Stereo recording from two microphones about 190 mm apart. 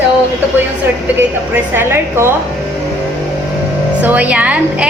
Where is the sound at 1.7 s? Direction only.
15° right (ahead or behind).